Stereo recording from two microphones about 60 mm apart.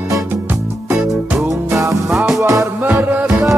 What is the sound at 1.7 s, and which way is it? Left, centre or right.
Music, right.